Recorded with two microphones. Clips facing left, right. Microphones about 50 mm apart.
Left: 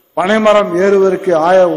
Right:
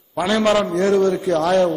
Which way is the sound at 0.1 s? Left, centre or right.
Left.